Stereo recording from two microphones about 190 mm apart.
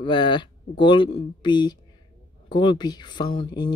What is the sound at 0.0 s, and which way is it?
Speech, 25° left (ahead or behind).